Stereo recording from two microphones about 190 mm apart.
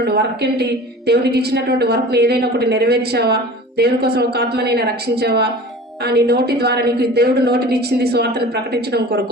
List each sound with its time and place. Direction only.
0.0 s a woman's voice: 60° right (ahead or behind)